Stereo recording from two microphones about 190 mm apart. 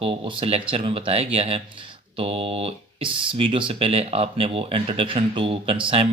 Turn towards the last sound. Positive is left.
turn(degrees=-30)  # may be behind; listen again after turning